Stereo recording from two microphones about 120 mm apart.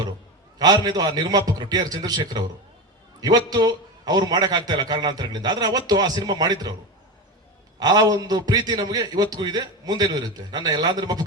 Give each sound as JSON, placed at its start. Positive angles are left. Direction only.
{"t": 0.6, "sound": "a man's voice", "side_deg": -35}
{"t": 7.8, "sound": "a man's voice", "side_deg": -35}